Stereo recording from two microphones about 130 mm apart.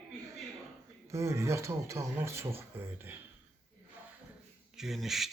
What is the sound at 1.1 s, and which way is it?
Speech, 20° right (ahead or behind).